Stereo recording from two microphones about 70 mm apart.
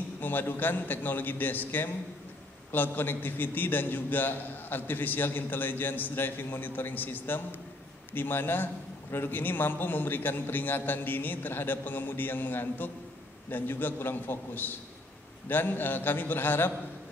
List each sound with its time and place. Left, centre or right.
0.2 s a man's voice: left